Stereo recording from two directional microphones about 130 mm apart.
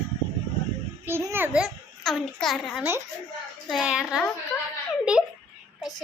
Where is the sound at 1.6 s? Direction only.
Centre (ahead or behind).